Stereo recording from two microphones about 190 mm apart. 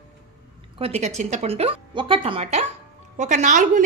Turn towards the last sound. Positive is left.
turn(degrees=-40)  # may be behind; listen again after turning